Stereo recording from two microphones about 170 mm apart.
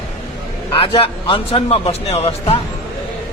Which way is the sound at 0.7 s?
30° left (ahead or behind).